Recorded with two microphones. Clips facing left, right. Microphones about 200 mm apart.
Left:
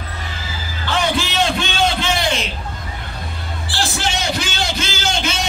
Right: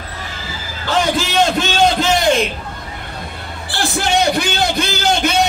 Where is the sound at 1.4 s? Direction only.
40° right (ahead or behind).